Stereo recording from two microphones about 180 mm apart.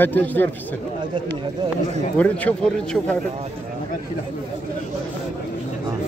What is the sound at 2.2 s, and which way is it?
Speech, 10° left (ahead or behind).